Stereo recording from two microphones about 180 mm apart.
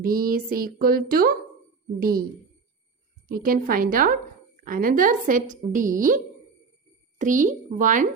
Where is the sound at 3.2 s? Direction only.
55° right (ahead or behind).